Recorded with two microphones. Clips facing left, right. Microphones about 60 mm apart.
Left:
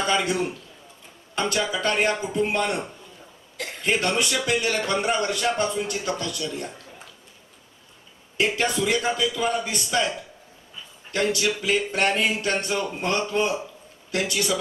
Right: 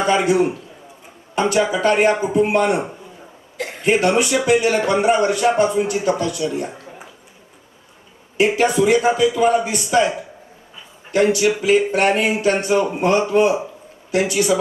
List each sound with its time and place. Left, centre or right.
0.0 s a man's voice: right
8.4 s a man's voice: right